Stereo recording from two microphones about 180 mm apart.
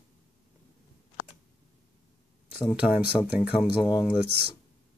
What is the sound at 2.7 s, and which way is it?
Speech, 5° right (ahead or behind).